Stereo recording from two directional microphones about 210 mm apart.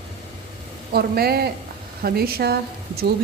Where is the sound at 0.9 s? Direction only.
50° right (ahead or behind).